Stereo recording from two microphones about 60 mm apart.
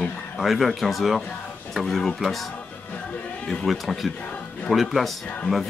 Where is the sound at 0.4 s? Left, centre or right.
Centre.